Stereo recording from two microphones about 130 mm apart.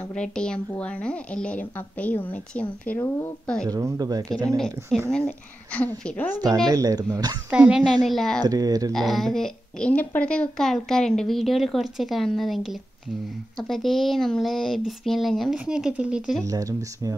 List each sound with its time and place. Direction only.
0.0 s speech: 5° left (ahead or behind)
3.6 s speech: 25° right (ahead or behind)
5.1 s speech: 10° left (ahead or behind)
6.3 s speech: 30° right (ahead or behind)
7.5 s a woman's voice: 5° right (ahead or behind)
8.4 s speech: 30° right (ahead or behind)
8.9 s a woman's voice: centre (ahead or behind)
16.4 s speech: 25° right (ahead or behind)